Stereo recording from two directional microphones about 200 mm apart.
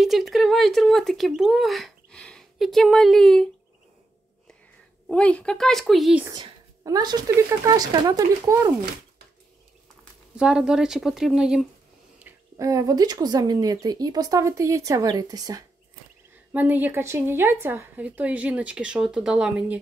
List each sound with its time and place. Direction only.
0.0 s speech: centre (ahead or behind)
5.0 s speech: 5° left (ahead or behind)
6.2 s speech: 20° right (ahead or behind)
10.3 s speech: 5° right (ahead or behind)